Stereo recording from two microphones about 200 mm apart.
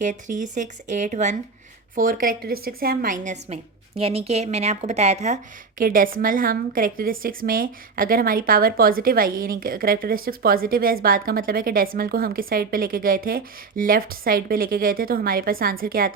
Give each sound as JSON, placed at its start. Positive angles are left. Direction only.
{"t": 0.0, "sound": "a woman's voice", "side_deg": -40}